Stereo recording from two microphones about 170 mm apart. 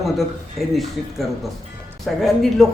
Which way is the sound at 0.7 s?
Centre (ahead or behind).